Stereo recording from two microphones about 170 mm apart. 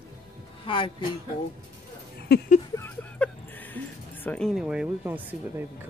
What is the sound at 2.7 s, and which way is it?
Music, 10° left (ahead or behind).